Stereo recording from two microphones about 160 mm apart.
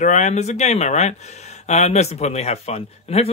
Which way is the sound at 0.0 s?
50° left (ahead or behind).